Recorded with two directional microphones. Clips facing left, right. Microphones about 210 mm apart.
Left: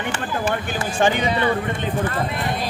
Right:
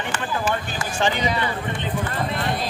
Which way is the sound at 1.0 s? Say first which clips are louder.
Left 4 dB; 50° left (ahead or behind).